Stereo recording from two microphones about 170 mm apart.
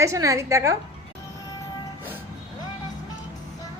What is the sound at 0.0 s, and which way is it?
Speech, 20° right (ahead or behind).